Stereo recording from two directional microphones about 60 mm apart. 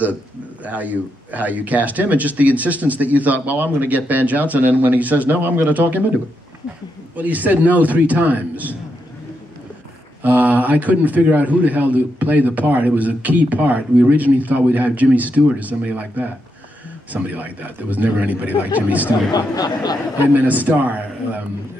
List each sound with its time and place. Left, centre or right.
0.7 s a man's voice: right
7.2 s a man's voice: right
10.2 s a man's voice: right
19.3 s speech: left
20.4 s a man's voice: right